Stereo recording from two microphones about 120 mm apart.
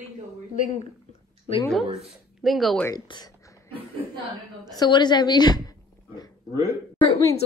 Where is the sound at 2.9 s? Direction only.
35° left (ahead or behind).